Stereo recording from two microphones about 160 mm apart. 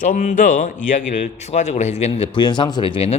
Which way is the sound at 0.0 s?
50° left (ahead or behind).